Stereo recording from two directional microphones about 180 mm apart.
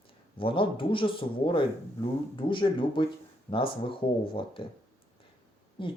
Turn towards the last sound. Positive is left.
turn(degrees=25)  # may be behind; listen again after turning